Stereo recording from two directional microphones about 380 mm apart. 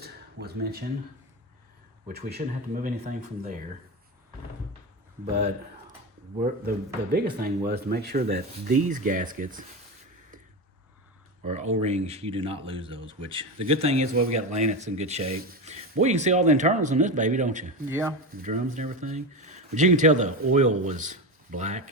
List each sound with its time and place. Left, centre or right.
0.0 s a sound: right
2.0 s speech: right
6.7 s speech: right
11.4 s speech: centre